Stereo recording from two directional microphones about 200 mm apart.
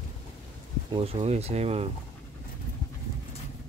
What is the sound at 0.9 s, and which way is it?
Speech, 30° right (ahead or behind).